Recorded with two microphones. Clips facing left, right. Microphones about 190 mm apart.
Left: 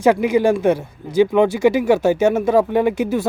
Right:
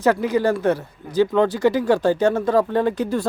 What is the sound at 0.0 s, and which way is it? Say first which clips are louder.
Speech: left 4 dB; 10° left (ahead or behind).